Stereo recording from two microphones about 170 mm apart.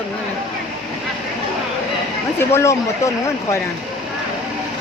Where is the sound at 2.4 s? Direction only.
15° left (ahead or behind).